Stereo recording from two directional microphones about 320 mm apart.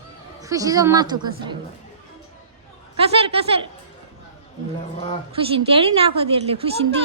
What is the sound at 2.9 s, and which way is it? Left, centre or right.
Speech, centre.